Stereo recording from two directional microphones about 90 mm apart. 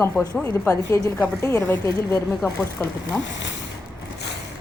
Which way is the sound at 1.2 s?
25° left (ahead or behind).